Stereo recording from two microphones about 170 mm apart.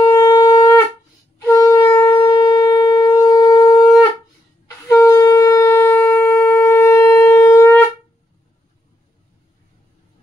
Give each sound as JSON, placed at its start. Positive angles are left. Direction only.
{"t": 0.1, "sound": "shofar", "side_deg": 20}